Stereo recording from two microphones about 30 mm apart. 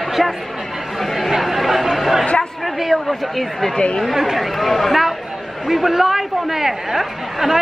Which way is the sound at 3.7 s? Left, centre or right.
Left.